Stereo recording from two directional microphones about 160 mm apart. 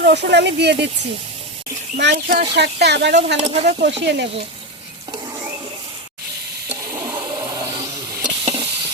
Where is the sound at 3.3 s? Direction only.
45° right (ahead or behind).